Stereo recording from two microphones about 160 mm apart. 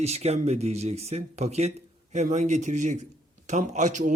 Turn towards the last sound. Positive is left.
turn(degrees=-50)  # may be behind; listen again after turning